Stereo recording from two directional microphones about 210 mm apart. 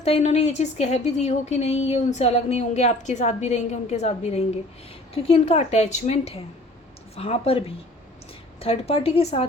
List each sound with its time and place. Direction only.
0.0 s a woman's voice: 30° left (ahead or behind)